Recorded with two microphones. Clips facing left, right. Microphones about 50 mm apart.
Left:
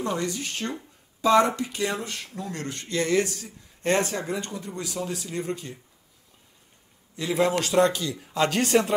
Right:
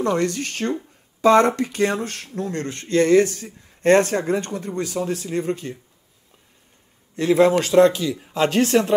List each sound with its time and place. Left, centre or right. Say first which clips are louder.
0.0 s speech: right 7 dB; right
7.2 s speech: right 8 dB; right